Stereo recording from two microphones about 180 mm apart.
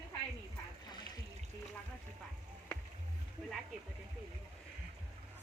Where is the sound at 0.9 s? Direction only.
20° left (ahead or behind).